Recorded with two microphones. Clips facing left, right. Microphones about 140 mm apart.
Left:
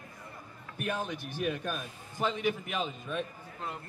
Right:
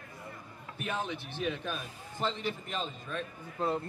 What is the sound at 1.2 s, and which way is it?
A man's voice, 10° left (ahead or behind).